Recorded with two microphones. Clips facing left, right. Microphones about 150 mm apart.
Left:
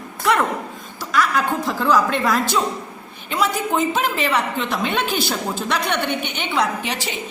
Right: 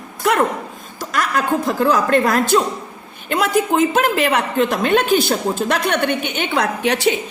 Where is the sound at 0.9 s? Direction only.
45° right (ahead or behind).